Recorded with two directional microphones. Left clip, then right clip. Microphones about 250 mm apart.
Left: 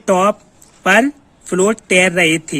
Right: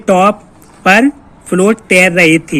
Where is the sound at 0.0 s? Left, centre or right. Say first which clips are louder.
Right 4 dB; left.